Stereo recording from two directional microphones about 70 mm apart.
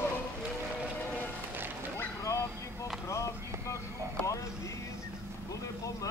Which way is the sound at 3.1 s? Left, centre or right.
Left.